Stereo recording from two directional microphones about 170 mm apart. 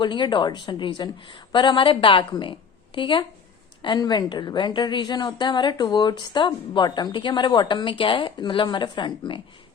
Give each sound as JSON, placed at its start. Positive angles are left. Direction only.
{"t": 0.0, "sound": "a woman's voice", "side_deg": 25}